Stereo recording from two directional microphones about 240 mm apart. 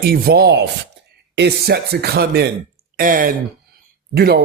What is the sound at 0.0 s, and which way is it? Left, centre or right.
A man's voice, right.